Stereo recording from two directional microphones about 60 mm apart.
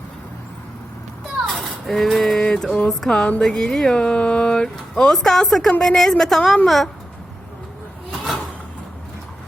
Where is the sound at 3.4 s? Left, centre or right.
Centre.